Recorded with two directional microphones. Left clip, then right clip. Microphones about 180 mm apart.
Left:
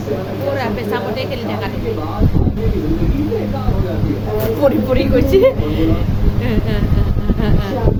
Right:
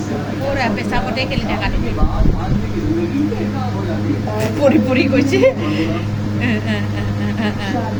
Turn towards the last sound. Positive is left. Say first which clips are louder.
# right 1 dB
turn(degrees=20)  # may be behind; listen again after turning